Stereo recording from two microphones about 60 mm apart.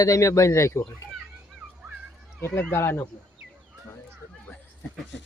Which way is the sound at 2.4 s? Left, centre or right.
Left.